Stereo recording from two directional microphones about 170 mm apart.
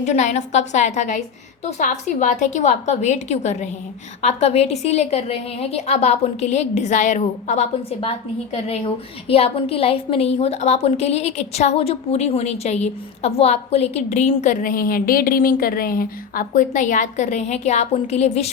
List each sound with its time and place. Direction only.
0.0 s a woman's voice: 45° left (ahead or behind)
9.2 s a woman's voice: 35° left (ahead or behind)